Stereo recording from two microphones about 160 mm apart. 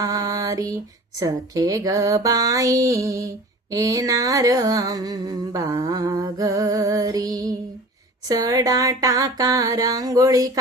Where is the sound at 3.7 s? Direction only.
20° right (ahead or behind).